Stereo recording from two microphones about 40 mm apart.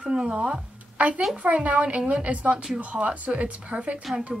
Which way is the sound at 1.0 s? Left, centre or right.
Right.